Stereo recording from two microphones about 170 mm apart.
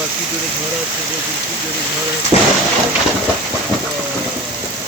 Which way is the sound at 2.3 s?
40° left (ahead or behind).